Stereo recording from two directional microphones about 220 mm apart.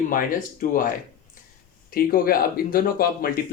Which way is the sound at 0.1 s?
40° left (ahead or behind).